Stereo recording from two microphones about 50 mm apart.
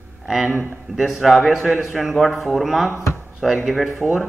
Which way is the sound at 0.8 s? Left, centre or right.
Centre.